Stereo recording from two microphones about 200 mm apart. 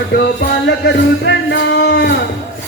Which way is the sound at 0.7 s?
60° left (ahead or behind).